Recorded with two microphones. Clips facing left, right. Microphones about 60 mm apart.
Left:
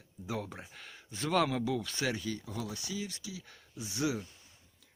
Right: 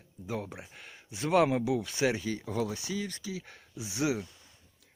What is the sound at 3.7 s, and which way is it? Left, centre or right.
Speech, centre.